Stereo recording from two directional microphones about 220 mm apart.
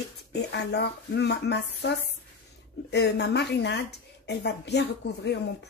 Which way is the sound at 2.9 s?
50° left (ahead or behind).